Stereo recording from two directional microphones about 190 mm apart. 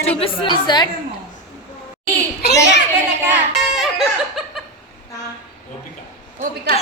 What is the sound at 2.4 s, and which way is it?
Speech, 65° left (ahead or behind).